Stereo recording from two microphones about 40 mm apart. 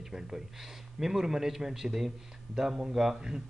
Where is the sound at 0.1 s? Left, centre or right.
Centre.